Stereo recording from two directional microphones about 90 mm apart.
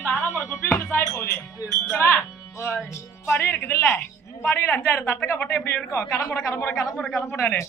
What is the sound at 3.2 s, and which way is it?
A woman's voice, 20° left (ahead or behind).